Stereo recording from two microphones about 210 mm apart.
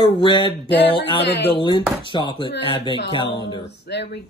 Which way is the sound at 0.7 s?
55° left (ahead or behind).